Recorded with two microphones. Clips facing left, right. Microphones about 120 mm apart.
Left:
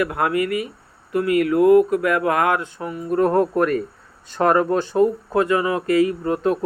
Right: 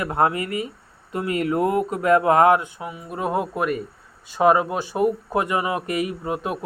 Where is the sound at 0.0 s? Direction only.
30° right (ahead or behind).